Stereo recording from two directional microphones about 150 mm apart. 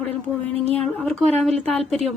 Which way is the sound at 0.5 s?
45° right (ahead or behind).